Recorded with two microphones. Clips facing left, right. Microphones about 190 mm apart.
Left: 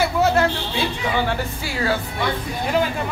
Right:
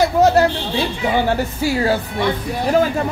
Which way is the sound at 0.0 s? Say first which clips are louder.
Right 5 dB; 40° right (ahead or behind).